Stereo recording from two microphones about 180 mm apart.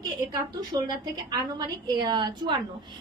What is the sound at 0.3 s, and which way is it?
A woman's voice, 20° right (ahead or behind).